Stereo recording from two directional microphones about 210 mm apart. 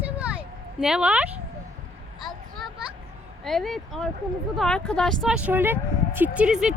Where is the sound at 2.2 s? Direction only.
Centre (ahead or behind).